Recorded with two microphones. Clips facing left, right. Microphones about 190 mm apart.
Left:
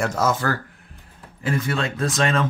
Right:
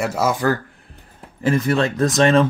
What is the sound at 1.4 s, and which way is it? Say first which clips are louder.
Speech: right 6 dB; 40° right (ahead or behind).